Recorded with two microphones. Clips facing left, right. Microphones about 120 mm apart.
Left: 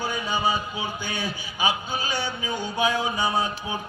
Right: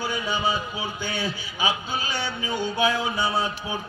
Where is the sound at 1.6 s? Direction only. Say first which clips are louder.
Left 1 dB; 15° left (ahead or behind).